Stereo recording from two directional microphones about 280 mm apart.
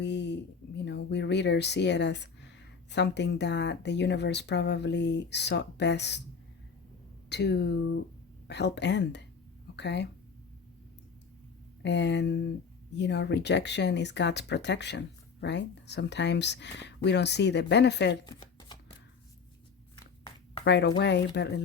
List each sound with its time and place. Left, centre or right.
0.0 s speech: left
7.3 s speech: left
11.8 s speech: left
18.3 s shuffling cards: centre
20.7 s speech: left